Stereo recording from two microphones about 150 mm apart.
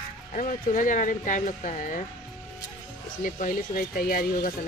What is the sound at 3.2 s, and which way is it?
Speech, 60° left (ahead or behind).